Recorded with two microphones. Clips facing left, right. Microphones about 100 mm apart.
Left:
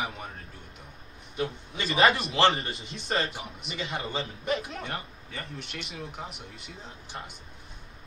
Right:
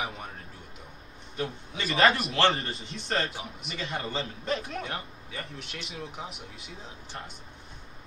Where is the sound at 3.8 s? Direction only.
20° left (ahead or behind).